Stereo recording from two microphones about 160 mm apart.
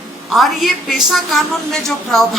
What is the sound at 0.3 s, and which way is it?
A child's voice, centre (ahead or behind).